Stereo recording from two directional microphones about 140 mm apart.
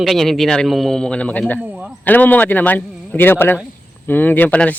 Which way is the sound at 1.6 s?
10° right (ahead or behind).